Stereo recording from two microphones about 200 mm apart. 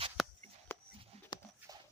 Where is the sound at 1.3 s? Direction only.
20° left (ahead or behind).